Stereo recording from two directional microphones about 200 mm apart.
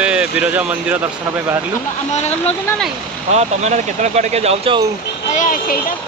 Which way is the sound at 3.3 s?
35° right (ahead or behind).